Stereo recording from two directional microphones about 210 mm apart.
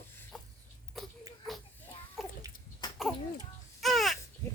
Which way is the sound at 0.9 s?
Centre (ahead or behind).